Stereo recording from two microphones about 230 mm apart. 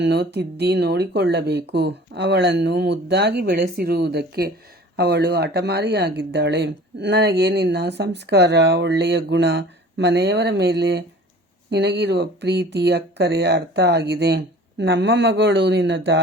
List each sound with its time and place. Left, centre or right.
0.0 s speech: right